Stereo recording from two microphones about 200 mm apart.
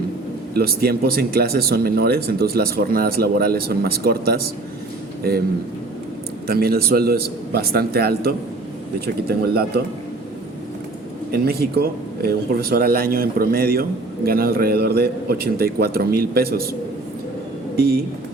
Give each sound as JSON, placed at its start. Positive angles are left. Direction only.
{"t": 0.5, "sound": "speech", "side_deg": -50}
{"t": 6.5, "sound": "speech", "side_deg": -50}
{"t": 11.3, "sound": "speech", "side_deg": -50}
{"t": 17.7, "sound": "speech", "side_deg": -50}